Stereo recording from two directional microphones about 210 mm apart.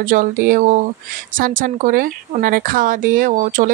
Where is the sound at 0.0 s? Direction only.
40° right (ahead or behind).